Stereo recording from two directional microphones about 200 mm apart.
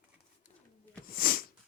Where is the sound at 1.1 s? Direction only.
45° left (ahead or behind).